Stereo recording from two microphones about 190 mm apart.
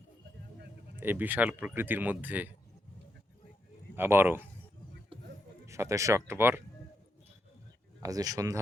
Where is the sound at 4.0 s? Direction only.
10° right (ahead or behind).